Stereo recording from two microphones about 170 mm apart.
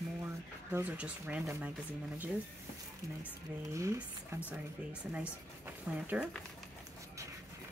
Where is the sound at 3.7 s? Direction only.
20° right (ahead or behind).